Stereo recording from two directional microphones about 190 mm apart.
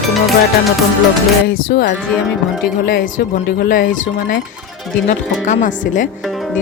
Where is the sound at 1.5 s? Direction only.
50° left (ahead or behind).